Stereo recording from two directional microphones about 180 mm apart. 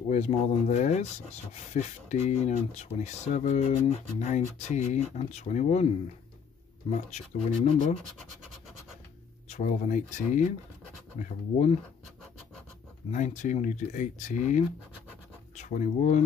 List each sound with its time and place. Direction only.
0.1 s speech: 40° left (ahead or behind)
7.1 s speech: 35° left (ahead or behind)
9.5 s speech: 40° left (ahead or behind)
13.1 s speech: 40° left (ahead or behind)